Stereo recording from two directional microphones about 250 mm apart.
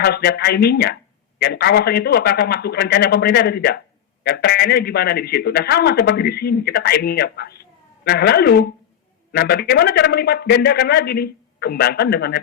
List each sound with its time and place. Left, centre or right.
0.0 s a man's voice: left